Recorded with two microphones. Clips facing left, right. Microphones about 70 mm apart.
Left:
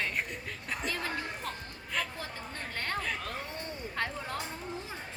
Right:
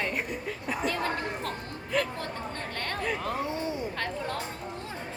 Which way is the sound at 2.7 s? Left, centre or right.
Centre.